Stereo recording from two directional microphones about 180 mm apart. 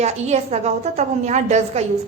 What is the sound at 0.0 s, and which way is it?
A woman's voice, 40° right (ahead or behind).